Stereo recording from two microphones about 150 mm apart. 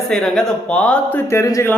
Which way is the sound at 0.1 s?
5° left (ahead or behind).